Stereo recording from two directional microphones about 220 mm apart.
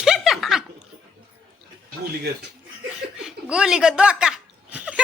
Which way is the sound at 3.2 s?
5° right (ahead or behind).